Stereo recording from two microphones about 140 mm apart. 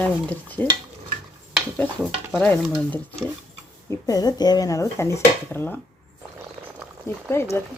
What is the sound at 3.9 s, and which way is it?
Speech, 25° left (ahead or behind).